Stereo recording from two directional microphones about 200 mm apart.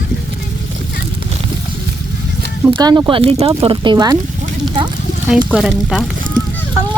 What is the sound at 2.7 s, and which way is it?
Speech, 20° right (ahead or behind).